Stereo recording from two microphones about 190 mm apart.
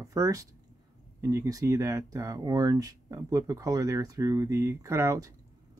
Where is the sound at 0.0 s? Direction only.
15° right (ahead or behind).